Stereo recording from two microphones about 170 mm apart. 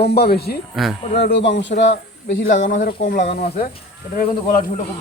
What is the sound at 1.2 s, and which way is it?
Speech, 90° left.